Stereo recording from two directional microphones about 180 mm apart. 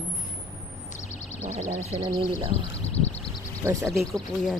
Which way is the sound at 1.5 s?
40° right (ahead or behind).